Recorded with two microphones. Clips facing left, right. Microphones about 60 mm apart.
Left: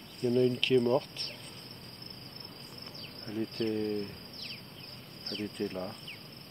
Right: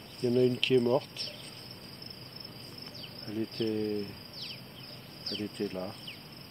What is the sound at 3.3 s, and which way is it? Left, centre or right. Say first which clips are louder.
Cricket: even; centre.